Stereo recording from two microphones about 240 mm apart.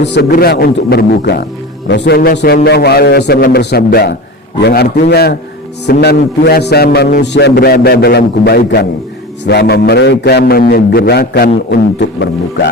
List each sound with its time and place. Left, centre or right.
0.0 s a man's voice: left